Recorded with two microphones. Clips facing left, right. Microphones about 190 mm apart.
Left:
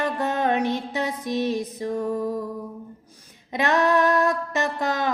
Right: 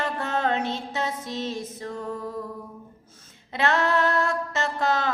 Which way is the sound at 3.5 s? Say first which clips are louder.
Left 3 dB; 15° left (ahead or behind).